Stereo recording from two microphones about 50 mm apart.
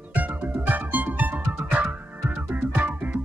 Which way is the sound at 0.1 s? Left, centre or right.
Right.